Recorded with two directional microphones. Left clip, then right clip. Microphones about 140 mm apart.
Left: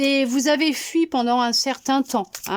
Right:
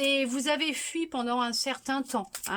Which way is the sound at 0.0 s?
35° left (ahead or behind).